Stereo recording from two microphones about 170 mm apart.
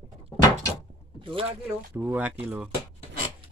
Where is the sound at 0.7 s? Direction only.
30° right (ahead or behind).